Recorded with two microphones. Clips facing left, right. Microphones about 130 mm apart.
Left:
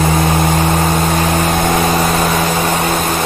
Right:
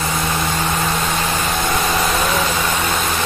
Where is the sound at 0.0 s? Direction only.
50° left (ahead or behind).